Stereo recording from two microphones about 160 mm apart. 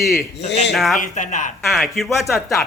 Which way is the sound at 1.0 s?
50° left (ahead or behind).